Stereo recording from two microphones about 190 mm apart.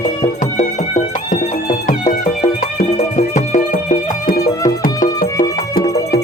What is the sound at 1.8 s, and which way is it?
Music, 40° left (ahead or behind).